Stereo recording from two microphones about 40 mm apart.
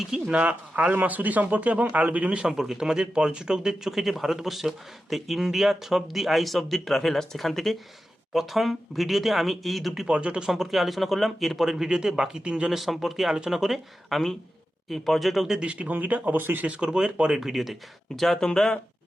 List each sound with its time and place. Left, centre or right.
0.3 s speech: right
2.5 s speech: centre
10.1 s speech: right
10.4 s speech: centre
12.7 s speech: centre
14.8 s speech: centre
15.9 s speech: right
16.8 s speech: right
17.3 s speech: centre
18.3 s speech: centre